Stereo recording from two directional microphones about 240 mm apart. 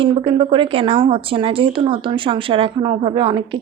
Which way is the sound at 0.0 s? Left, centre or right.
Right.